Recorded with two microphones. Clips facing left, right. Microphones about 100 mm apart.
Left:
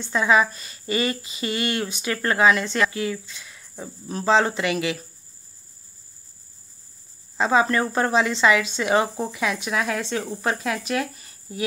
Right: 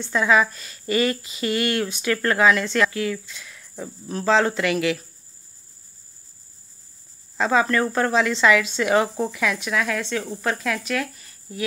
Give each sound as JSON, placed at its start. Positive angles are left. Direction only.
{"t": 0.0, "sound": "speech", "side_deg": 5}
{"t": 7.3, "sound": "speech", "side_deg": 10}
{"t": 9.7, "sound": "speech", "side_deg": 30}
{"t": 10.2, "sound": "speech", "side_deg": 15}
{"t": 11.0, "sound": "a sound", "side_deg": 25}